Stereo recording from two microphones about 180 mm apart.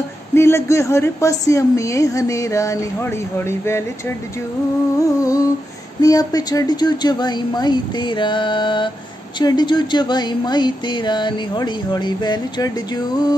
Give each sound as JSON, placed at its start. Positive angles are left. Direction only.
{"t": 0.3, "sound": "a woman's voice", "side_deg": 15}
{"t": 5.2, "sound": "humming", "side_deg": 20}
{"t": 5.9, "sound": "speech", "side_deg": 20}